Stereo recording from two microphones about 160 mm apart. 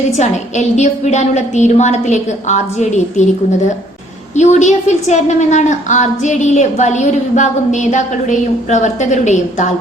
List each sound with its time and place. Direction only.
0.2 s a woman's voice: 45° left (ahead or behind)
4.4 s a woman's voice: 45° left (ahead or behind)